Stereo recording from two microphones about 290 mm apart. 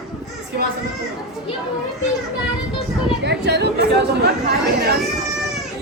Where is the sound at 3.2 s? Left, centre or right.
Right.